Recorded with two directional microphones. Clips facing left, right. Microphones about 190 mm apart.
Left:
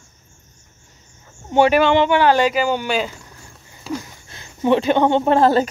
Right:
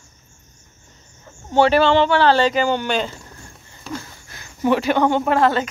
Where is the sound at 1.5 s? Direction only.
15° left (ahead or behind).